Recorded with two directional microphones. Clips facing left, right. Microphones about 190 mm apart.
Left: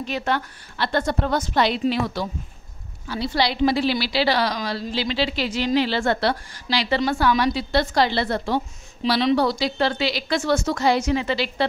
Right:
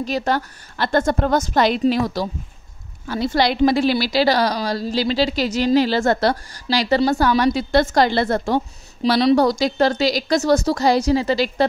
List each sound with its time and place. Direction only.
0.0 s a woman's voice: 40° right (ahead or behind)